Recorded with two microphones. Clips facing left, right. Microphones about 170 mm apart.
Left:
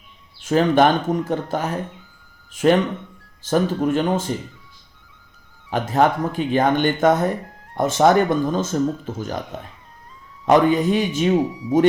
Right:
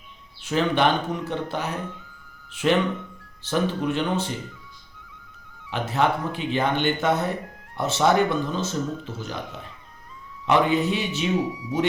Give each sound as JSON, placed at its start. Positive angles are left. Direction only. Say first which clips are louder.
{"t": 0.4, "sound": "speech", "louder": "left 6 dB", "side_deg": 45}
{"t": 5.7, "sound": "speech", "louder": "left 5 dB", "side_deg": 45}